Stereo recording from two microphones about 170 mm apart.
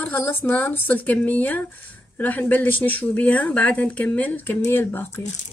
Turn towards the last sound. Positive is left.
turn(degrees=15)  # may be behind; listen again after turning